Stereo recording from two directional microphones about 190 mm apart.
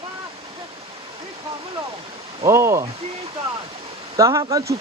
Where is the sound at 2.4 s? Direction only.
15° right (ahead or behind).